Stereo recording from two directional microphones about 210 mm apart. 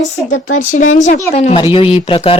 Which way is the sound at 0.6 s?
35° left (ahead or behind).